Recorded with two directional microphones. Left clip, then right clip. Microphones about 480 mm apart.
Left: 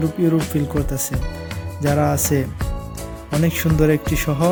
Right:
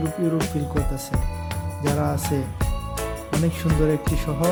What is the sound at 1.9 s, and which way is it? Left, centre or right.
Music, centre.